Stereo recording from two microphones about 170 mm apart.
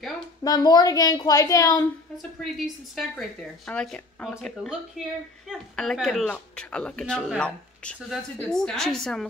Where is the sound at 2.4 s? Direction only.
Centre (ahead or behind).